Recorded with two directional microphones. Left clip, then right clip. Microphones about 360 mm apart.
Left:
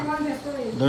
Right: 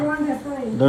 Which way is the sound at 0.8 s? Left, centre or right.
Centre.